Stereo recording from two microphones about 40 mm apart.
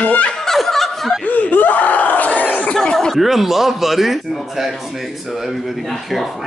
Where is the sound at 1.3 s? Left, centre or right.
Left.